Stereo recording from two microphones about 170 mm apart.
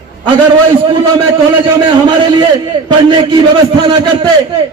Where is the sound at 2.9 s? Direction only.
30° right (ahead or behind).